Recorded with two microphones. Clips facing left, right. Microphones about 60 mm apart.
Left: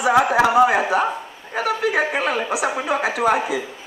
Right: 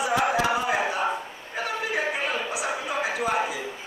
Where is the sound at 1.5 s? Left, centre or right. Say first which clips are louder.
Left 8 dB; left.